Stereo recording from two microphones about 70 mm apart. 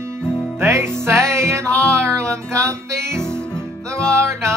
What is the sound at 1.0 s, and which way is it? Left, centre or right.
Music, right.